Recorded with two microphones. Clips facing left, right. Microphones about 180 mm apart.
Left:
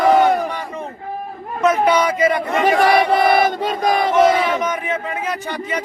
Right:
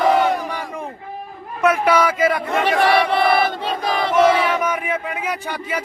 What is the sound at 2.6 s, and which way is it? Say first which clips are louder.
Battle cry: left 2 dB; 45° left (ahead or behind).